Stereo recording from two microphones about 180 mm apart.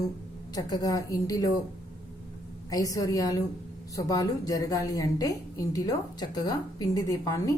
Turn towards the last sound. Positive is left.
turn(degrees=20)  # may be behind; listen again after turning